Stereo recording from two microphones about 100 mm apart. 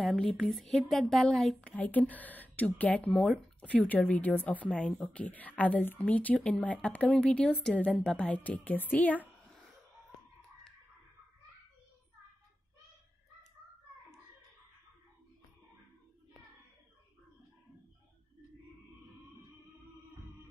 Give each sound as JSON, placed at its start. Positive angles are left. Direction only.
{"t": 0.0, "sound": "speech", "side_deg": 0}
{"t": 1.7, "sound": "speech", "side_deg": 15}
{"t": 3.2, "sound": "speech", "side_deg": 5}
{"t": 3.8, "sound": "speech", "side_deg": 15}